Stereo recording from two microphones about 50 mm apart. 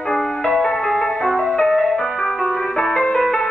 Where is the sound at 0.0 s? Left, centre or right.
Centre.